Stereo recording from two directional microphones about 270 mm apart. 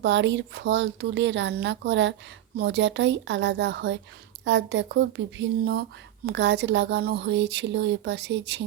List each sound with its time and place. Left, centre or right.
0.0 s speech: right
6.2 s speech: right